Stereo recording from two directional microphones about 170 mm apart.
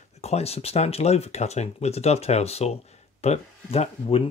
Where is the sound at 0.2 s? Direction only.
40° left (ahead or behind).